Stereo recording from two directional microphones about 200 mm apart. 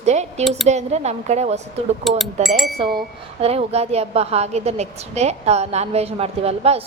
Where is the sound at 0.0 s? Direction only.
35° right (ahead or behind).